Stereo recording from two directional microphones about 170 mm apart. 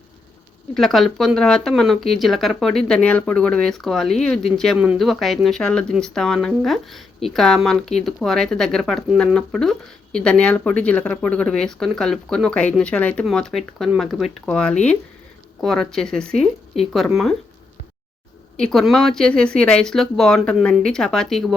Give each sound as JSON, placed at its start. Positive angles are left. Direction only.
{"t": 0.7, "sound": "speech", "side_deg": 0}
{"t": 18.5, "sound": "speech", "side_deg": 5}